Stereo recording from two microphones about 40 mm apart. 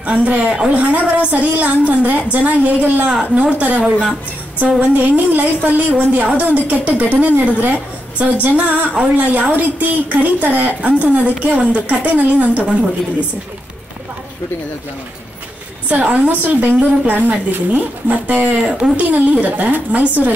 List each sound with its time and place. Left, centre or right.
0.0 s a woman's voice: right
0.7 s a woman's voice: right
3.1 s a woman's voice: right
4.8 s a woman's voice: right
15.9 s a woman's voice: right
18.6 s speech: centre
18.9 s a woman's voice: right